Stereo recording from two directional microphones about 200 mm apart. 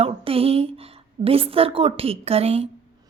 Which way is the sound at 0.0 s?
30° right (ahead or behind).